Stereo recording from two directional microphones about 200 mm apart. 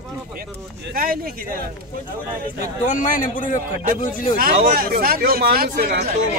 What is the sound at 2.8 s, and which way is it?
Speech, 40° left (ahead or behind).